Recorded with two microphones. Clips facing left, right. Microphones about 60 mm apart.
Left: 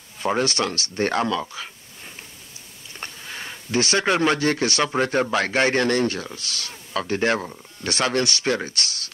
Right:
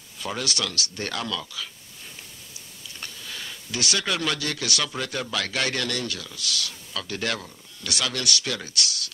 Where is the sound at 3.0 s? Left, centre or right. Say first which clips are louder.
Left 4 dB; left.